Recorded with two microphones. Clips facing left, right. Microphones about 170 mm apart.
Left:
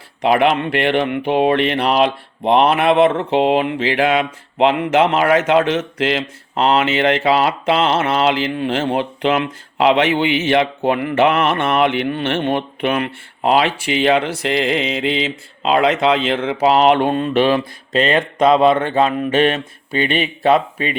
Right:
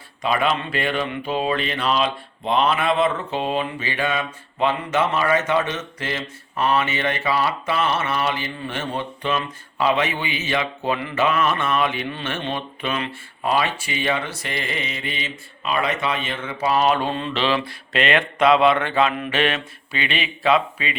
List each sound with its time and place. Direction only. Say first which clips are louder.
0.2 s speech: left 7 dB; 70° left (ahead or behind)
3.2 s a sound: left 9 dB; 75° left (ahead or behind)
6.6 s speech: left 6 dB; 85° left; by 20.9 s 50° left (ahead or behind)